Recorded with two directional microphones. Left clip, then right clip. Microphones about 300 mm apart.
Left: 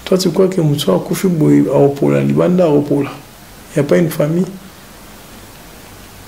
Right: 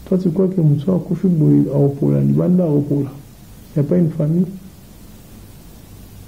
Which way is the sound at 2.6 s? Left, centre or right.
Left.